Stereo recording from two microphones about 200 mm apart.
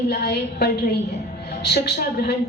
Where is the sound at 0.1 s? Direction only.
55° left (ahead or behind).